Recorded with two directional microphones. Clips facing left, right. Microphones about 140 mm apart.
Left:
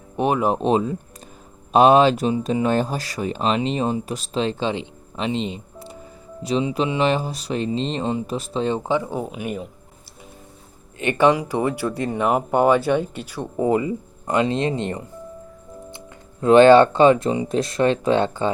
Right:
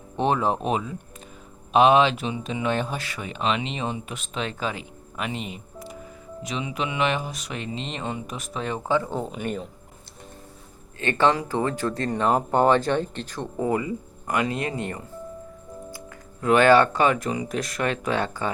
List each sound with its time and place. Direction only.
0.2 s speech: 15° left (ahead or behind)
0.6 s speech: 35° left (ahead or behind); by 9.6 s 5° left (ahead or behind)
11.0 s speech: 15° left (ahead or behind)
13.7 s speech: 25° left (ahead or behind)
16.4 s speech: 25° left (ahead or behind)